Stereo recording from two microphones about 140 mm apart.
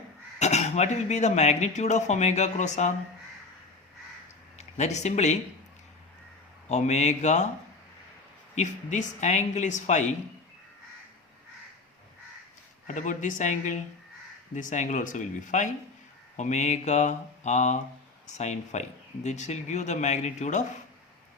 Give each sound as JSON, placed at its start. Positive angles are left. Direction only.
{"t": 0.3, "sound": "speech", "side_deg": 55}
{"t": 4.5, "sound": "speech", "side_deg": 55}
{"t": 6.7, "sound": "speech", "side_deg": 55}
{"t": 8.5, "sound": "speech", "side_deg": 60}
{"t": 12.9, "sound": "speech", "side_deg": 65}